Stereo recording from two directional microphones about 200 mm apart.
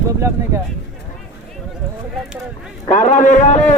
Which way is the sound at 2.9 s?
35° left (ahead or behind).